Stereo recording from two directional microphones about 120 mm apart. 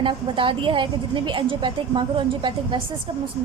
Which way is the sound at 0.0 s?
45° right (ahead or behind).